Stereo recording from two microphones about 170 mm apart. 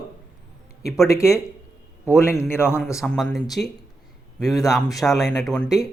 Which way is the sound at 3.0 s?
Centre (ahead or behind).